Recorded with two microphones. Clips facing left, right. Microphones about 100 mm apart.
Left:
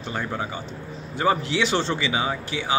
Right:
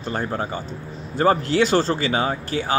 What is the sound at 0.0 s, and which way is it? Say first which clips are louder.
Speech: right 3 dB; 40° right (ahead or behind).